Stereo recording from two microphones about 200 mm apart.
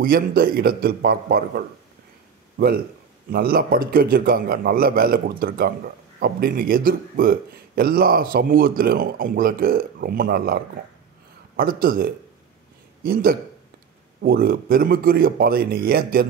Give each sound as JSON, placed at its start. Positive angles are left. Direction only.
{"t": 0.0, "sound": "speech", "side_deg": -45}
{"t": 3.3, "sound": "speech", "side_deg": -50}